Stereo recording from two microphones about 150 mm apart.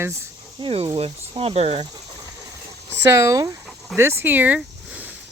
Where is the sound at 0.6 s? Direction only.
40° right (ahead or behind).